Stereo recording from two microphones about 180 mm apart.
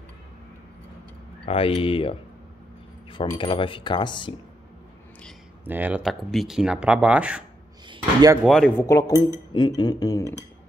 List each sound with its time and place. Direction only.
1.4 s speech: 30° left (ahead or behind)
5.7 s speech: 10° right (ahead or behind)
7.9 s a sound: 20° right (ahead or behind)
8.5 s speech: 5° left (ahead or behind)